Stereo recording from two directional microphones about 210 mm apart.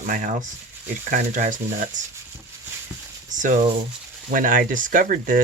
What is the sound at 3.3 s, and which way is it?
Speech, 35° right (ahead or behind).